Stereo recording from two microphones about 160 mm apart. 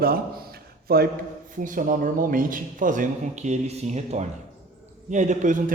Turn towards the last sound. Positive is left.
turn(degrees=-50)  # may be behind; listen again after turning